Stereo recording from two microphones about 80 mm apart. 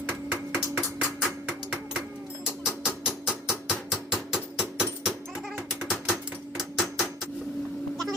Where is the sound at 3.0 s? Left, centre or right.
Centre.